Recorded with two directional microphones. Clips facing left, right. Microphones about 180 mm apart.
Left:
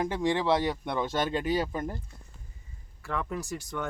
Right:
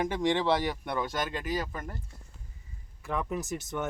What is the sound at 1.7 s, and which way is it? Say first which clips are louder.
Speech: left 6 dB; 30° left (ahead or behind).